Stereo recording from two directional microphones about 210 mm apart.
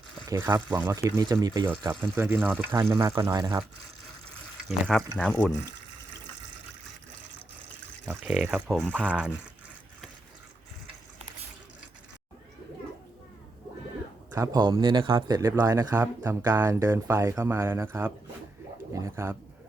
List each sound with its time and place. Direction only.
0.3 s speech: 10° right (ahead or behind)
5.1 s speech: 5° left (ahead or behind)
8.1 s speech: 5° right (ahead or behind)
14.3 s speech: 15° right (ahead or behind)